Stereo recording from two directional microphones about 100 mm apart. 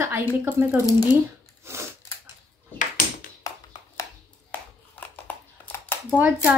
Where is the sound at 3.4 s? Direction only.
35° left (ahead or behind).